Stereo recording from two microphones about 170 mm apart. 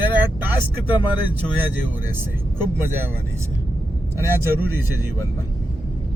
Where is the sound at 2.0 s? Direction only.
15° right (ahead or behind).